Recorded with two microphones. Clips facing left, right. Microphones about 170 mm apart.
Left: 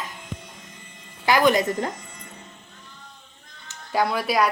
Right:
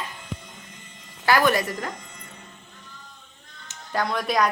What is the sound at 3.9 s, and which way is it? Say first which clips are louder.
Speech: left 2 dB; 5° left (ahead or behind).